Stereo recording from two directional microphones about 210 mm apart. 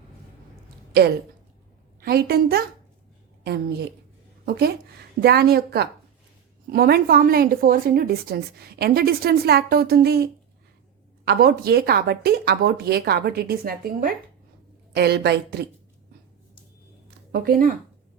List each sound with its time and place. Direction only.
2.0 s a woman's voice: 45° right (ahead or behind)
11.3 s a woman's voice: 45° right (ahead or behind)
17.3 s a woman's voice: 45° right (ahead or behind)